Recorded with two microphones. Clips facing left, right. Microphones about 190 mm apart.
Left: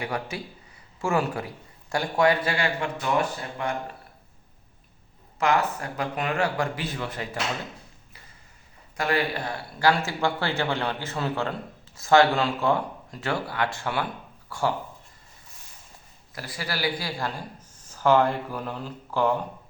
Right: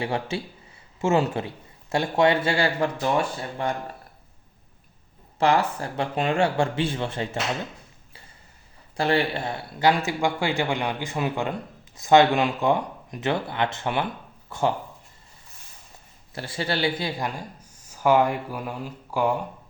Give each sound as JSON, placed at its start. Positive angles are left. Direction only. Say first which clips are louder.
{"t": 0.0, "sound": "speech", "louder": "right 4 dB", "side_deg": -25}
{"t": 5.4, "sound": "speech", "louder": "right 2 dB", "side_deg": -30}
{"t": 9.0, "sound": "speech", "louder": "right 3 dB", "side_deg": -30}
{"t": 16.3, "sound": "speech", "louder": "right 5 dB", "side_deg": -25}